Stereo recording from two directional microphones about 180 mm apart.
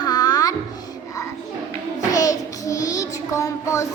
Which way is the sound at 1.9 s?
20° left (ahead or behind).